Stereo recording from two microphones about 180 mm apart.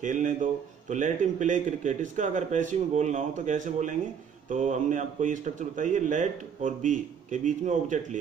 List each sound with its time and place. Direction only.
0.0 s a man's voice: 45° right (ahead or behind)